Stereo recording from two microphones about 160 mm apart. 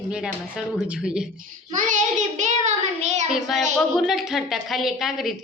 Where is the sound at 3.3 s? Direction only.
Centre (ahead or behind).